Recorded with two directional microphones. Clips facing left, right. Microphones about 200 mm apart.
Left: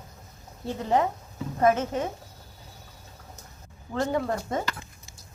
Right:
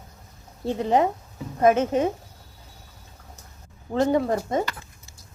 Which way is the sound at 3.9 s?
20° right (ahead or behind).